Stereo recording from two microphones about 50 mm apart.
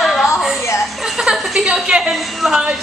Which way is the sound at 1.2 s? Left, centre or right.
Centre.